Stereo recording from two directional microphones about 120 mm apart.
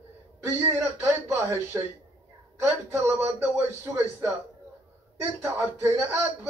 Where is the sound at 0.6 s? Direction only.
25° right (ahead or behind).